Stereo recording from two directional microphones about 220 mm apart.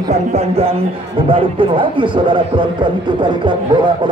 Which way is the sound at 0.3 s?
30° right (ahead or behind).